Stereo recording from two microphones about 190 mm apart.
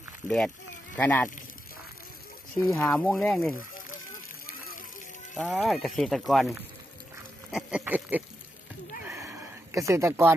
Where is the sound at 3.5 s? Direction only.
50° left (ahead or behind).